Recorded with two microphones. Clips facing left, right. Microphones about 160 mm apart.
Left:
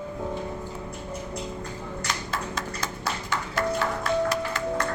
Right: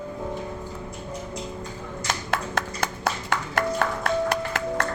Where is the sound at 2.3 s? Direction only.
65° right (ahead or behind).